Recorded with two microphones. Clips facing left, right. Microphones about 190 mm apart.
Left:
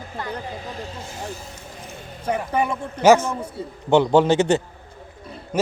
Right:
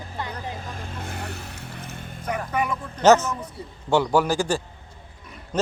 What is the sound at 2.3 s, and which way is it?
A man's voice, 30° left (ahead or behind).